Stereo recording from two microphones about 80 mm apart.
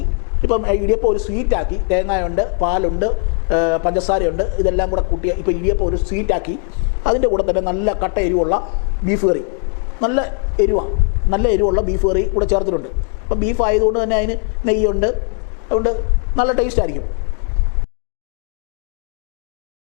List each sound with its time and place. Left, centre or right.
0.4 s a man's voice: centre
13.4 s a man's voice: centre